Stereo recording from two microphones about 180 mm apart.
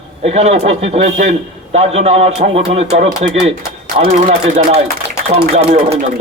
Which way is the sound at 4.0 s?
50° right (ahead or behind).